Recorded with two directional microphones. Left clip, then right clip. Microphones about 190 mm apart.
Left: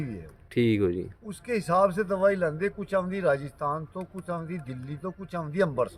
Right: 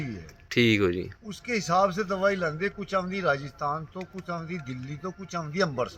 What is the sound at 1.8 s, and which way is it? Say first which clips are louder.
A man's voice: left 2 dB; 30° left (ahead or behind).